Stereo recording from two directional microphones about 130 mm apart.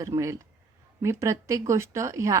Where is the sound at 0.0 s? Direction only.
25° right (ahead or behind).